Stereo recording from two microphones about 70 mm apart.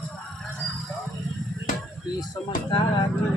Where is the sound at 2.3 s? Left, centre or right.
Left.